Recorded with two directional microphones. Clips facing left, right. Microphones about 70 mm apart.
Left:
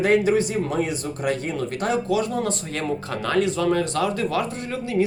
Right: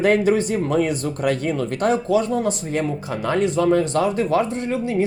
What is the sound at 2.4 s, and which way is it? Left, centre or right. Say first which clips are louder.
Speech: right 3 dB; centre.